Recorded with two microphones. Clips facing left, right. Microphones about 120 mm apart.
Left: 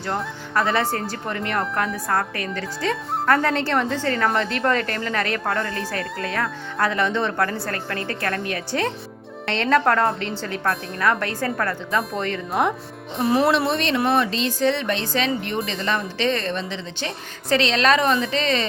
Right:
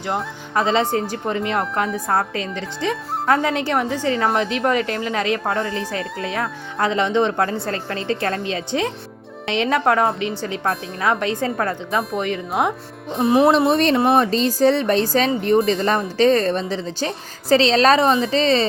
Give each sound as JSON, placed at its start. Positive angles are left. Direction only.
{"t": 0.5, "sound": "a woman's voice", "side_deg": -20}
{"t": 13.7, "sound": "speech", "side_deg": -40}